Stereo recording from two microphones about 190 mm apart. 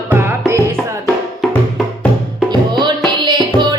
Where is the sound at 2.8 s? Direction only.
25° right (ahead or behind).